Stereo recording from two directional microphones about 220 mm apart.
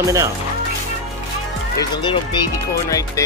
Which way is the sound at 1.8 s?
20° left (ahead or behind).